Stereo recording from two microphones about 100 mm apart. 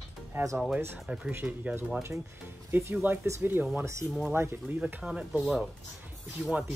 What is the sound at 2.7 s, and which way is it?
Speech, 25° right (ahead or behind).